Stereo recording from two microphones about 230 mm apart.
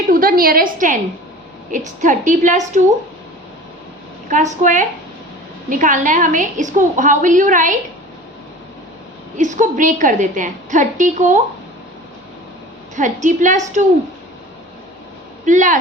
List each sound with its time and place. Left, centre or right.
0.1 s a woman's voice: right
4.3 s a woman's voice: right
9.4 s a woman's voice: right
13.0 s a woman's voice: right
15.4 s a woman's voice: right